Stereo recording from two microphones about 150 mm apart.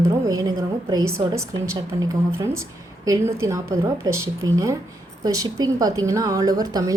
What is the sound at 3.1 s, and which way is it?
A woman's voice, 20° right (ahead or behind).